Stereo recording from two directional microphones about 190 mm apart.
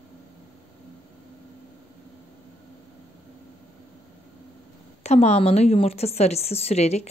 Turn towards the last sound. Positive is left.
turn(degrees=35)  # may be behind; listen again after turning